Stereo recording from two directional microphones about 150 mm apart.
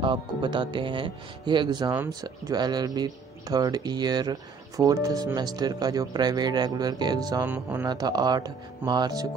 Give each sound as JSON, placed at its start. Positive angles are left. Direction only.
{"t": 0.0, "sound": "speech", "side_deg": -30}
{"t": 1.9, "sound": "speech", "side_deg": -20}
{"t": 7.4, "sound": "speech", "side_deg": -10}
{"t": 7.8, "sound": "speech", "side_deg": -25}